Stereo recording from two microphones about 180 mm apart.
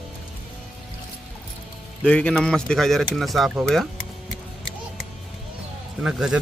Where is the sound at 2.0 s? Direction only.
5° left (ahead or behind).